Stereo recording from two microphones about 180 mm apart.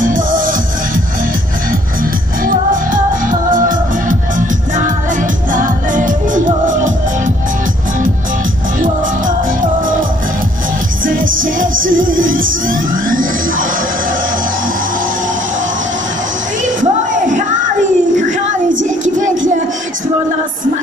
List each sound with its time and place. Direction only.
0.0 s music: 50° right (ahead or behind)
2.4 s music: 50° right (ahead or behind)
5.5 s music: 45° right (ahead or behind)
9.6 s music: 45° right (ahead or behind)
11.1 s music: 50° right (ahead or behind)
16.6 s a sound: 45° right (ahead or behind)
19.1 s music: 45° right (ahead or behind)